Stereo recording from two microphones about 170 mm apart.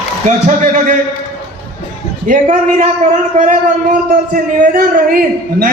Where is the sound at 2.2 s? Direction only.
45° right (ahead or behind).